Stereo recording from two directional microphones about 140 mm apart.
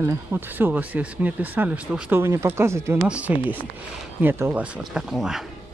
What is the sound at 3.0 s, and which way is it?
Speech, 10° right (ahead or behind).